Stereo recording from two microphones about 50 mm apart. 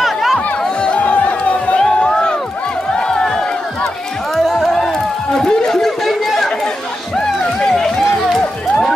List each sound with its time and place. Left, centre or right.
0.0 s chatter: centre
0.7 s music: left
1.8 s music: centre
2.9 s crowd: centre
4.4 s a sound: centre
4.6 s chatter: centre
7.2 s a sound: centre
8.4 s music: centre